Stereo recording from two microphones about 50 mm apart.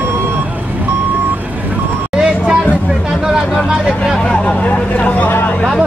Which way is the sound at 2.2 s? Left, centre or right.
Centre.